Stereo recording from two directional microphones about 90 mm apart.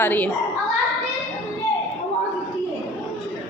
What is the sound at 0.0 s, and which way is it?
Speech, 20° left (ahead or behind).